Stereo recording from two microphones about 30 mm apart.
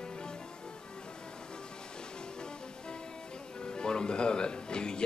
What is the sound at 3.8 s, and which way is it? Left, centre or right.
Speech, left.